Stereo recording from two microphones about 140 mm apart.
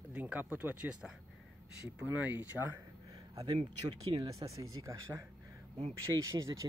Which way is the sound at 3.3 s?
30° right (ahead or behind).